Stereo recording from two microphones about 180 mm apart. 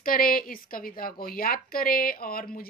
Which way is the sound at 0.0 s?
55° left (ahead or behind).